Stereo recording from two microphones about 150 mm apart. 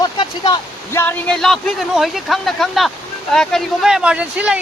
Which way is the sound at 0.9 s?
15° left (ahead or behind).